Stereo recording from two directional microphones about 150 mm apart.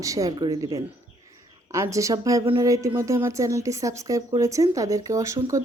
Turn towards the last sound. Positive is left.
turn(degrees=-20)  # may be behind; listen again after turning